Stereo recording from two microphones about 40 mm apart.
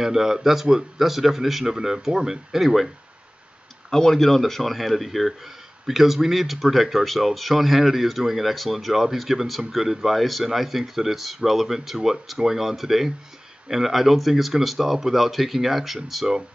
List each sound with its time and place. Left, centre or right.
0.0 s speech: centre
3.9 s speech: centre